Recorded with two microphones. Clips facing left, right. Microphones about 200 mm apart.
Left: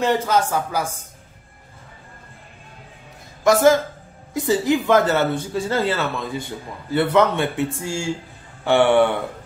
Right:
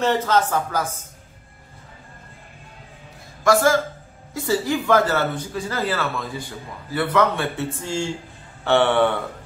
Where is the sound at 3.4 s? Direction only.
20° left (ahead or behind).